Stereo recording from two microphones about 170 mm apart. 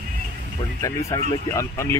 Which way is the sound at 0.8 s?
20° left (ahead or behind).